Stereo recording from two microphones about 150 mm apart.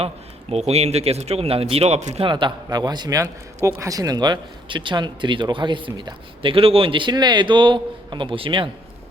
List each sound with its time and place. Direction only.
0.5 s speech: 45° right (ahead or behind)
2.2 s a man's voice: 30° right (ahead or behind)